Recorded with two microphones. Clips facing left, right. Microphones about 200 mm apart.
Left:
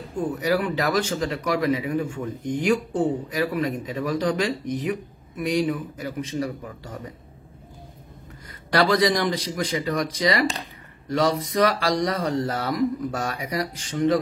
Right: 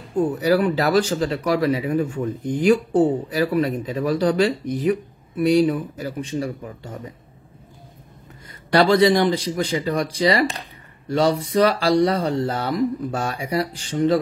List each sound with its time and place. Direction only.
0.3 s speech: 35° right (ahead or behind)
8.7 s speech: 30° right (ahead or behind)